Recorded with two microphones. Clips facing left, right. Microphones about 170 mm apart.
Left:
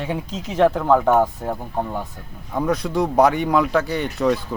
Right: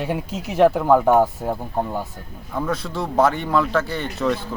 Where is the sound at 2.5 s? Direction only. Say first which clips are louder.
Left 3 dB; 15° left (ahead or behind).